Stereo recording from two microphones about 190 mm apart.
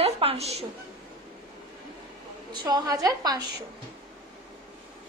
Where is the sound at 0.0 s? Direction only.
30° right (ahead or behind).